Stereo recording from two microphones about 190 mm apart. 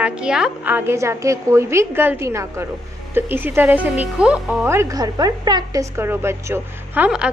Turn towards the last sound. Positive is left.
turn(degrees=-5)  # may be behind; listen again after turning